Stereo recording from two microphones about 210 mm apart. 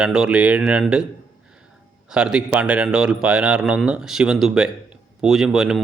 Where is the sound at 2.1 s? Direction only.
5° right (ahead or behind).